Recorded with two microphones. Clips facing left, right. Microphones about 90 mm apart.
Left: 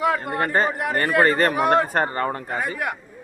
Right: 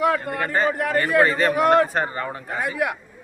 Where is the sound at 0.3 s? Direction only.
45° left (ahead or behind).